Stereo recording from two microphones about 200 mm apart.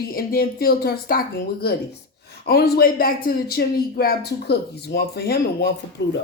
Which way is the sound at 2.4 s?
50° left (ahead or behind).